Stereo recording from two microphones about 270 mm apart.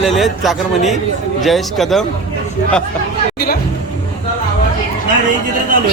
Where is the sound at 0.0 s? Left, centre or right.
Centre.